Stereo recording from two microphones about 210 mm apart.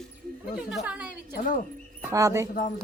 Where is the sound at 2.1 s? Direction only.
15° right (ahead or behind).